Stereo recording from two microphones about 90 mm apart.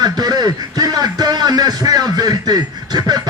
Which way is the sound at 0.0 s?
50° right (ahead or behind).